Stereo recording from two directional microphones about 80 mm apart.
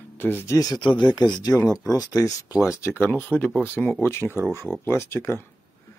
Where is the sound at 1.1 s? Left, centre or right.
Left.